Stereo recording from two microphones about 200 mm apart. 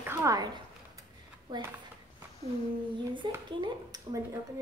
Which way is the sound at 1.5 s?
20° right (ahead or behind).